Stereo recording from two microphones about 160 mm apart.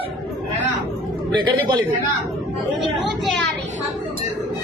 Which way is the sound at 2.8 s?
Centre (ahead or behind).